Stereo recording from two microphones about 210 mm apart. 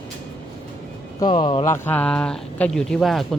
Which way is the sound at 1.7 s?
10° left (ahead or behind).